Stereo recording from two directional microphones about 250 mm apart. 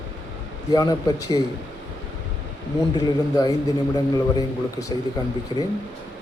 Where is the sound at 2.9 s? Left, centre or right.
Centre.